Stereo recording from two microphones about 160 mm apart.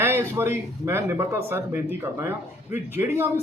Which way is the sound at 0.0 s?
15° right (ahead or behind).